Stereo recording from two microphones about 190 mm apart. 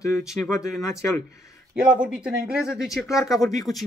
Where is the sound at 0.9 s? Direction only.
15° left (ahead or behind).